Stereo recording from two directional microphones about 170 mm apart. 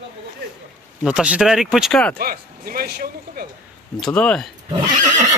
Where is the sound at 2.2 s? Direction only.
60° right (ahead or behind).